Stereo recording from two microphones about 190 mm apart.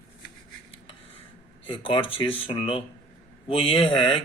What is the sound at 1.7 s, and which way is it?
Speech, 25° left (ahead or behind).